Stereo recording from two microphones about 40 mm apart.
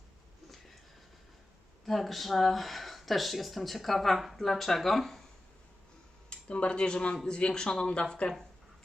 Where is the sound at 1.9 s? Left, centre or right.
Centre.